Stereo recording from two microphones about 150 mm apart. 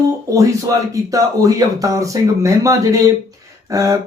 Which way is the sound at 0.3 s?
20° right (ahead or behind).